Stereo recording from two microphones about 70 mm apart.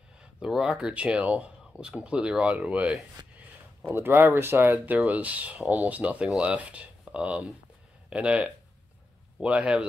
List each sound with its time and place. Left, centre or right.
0.2 s speech: centre
3.2 s a sound: right
3.9 s speech: right; by 9.8 s centre